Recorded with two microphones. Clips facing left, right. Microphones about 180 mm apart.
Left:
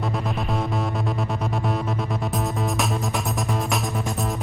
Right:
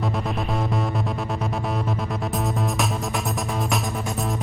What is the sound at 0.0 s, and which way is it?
Music, centre (ahead or behind).